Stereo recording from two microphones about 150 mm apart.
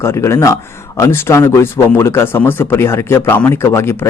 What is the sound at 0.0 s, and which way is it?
Speech, 15° left (ahead or behind).